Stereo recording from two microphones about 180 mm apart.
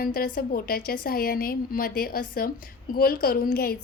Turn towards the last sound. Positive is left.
turn(degrees=55)  # may be behind; listen again after turning